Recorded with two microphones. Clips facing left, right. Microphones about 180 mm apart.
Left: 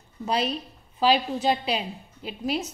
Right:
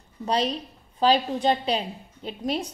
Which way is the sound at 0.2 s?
5° left (ahead or behind).